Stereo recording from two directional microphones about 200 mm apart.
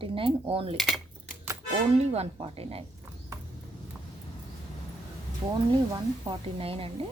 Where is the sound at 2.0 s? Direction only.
30° right (ahead or behind).